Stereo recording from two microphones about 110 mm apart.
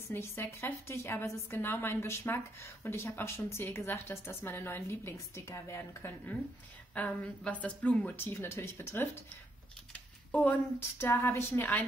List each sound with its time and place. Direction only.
0.1 s a woman's voice: 20° left (ahead or behind)
10.3 s a woman's voice: 15° left (ahead or behind)